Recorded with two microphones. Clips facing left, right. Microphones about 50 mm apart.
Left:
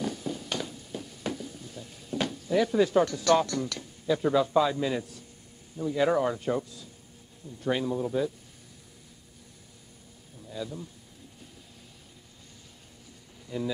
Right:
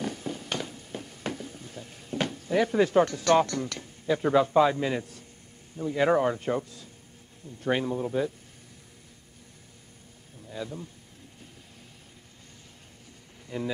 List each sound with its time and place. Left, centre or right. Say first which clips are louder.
0.0 s a sound: left 1 dB; right
5.8 s speech: right 1 dB; right
10.5 s a man's voice: even; right
13.5 s speech: even; right